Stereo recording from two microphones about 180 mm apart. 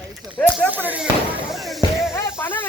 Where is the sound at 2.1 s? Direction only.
10° left (ahead or behind).